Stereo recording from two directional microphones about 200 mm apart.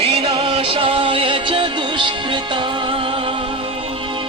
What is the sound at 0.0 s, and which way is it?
Music, 30° right (ahead or behind).